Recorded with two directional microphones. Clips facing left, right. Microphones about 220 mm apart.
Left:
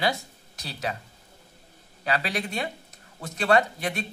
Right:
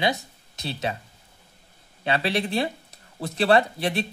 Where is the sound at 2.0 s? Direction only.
30° right (ahead or behind).